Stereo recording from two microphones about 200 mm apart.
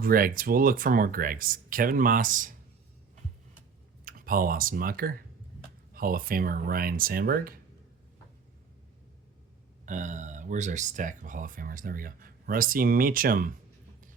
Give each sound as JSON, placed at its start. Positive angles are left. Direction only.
{"t": 0.0, "sound": "speech", "side_deg": -45}
{"t": 4.0, "sound": "speech", "side_deg": -45}
{"t": 9.8, "sound": "speech", "side_deg": -40}